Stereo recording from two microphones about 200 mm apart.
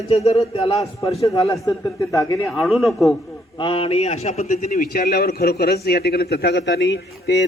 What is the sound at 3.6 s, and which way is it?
A man's voice, 25° left (ahead or behind).